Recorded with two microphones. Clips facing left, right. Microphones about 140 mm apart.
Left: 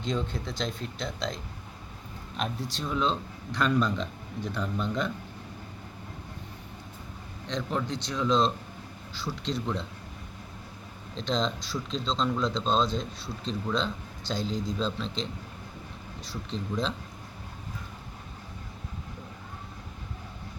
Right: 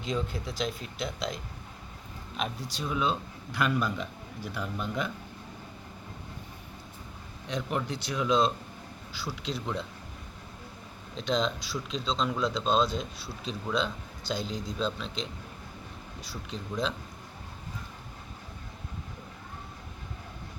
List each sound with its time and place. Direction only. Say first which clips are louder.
0.0 s speech: left 1 dB; 5° right (ahead or behind)
2.4 s speech: left 1 dB; centre (ahead or behind)
7.4 s speech: left 1 dB; 10° right (ahead or behind)
11.2 s speech: even; 5° right (ahead or behind)
16.3 s speech: left 3 dB; centre (ahead or behind)